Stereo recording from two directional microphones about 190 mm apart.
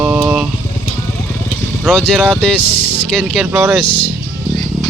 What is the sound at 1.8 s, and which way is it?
Speech, centre (ahead or behind).